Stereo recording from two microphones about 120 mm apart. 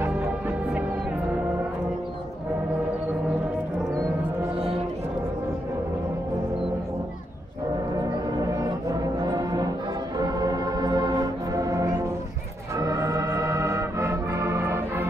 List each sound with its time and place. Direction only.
0.0 s music: 15° right (ahead or behind)
8.0 s gong: 30° right (ahead or behind)
9.2 s brass instrument: 35° right (ahead or behind)
10.1 s music: 35° right (ahead or behind)